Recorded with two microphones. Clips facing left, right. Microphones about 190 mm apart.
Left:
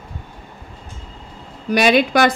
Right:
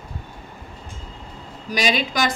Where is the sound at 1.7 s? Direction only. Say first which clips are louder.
Left 8 dB; 60° left (ahead or behind).